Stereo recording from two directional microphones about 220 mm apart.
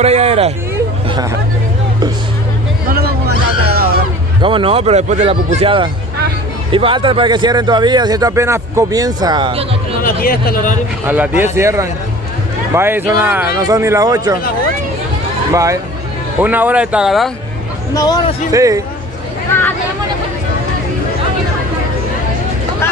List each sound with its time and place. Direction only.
0.0 s speech: 30° right (ahead or behind)
3.6 s a sound: 45° right (ahead or behind)
4.4 s speech: 25° right (ahead or behind)
10.0 s speech: 40° left (ahead or behind)
11.1 s speech: 10° right (ahead or behind)
15.5 s speech: 15° right (ahead or behind)
17.9 s speech: 20° left (ahead or behind)
18.5 s speech: 15° right (ahead or behind)